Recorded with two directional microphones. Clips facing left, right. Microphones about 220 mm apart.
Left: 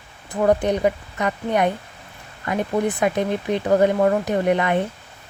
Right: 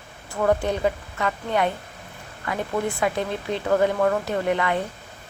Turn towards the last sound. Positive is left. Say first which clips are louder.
# left 4 dB
turn(degrees=20)  # may be behind; listen again after turning